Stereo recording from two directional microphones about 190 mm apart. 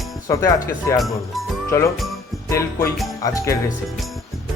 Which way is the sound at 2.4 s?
15° left (ahead or behind).